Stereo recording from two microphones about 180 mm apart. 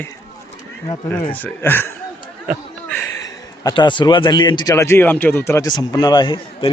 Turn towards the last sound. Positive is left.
turn(degrees=25)  # may be behind; listen again after turning